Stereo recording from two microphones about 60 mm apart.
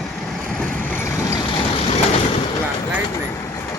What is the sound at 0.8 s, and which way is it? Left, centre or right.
Vehicle, left.